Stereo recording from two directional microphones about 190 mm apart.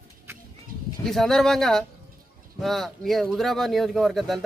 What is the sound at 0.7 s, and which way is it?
Bird, 50° right (ahead or behind).